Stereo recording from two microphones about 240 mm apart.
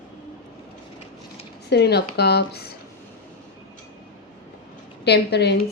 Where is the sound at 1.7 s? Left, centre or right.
Left.